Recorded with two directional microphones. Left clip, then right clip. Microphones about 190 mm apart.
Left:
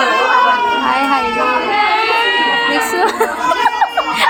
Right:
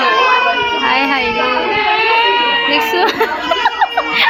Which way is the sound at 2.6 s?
10° left (ahead or behind).